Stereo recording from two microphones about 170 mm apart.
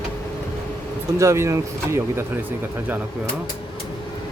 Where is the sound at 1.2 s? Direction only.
15° right (ahead or behind).